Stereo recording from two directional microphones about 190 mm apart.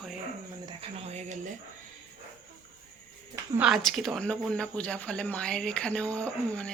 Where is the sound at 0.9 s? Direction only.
35° right (ahead or behind).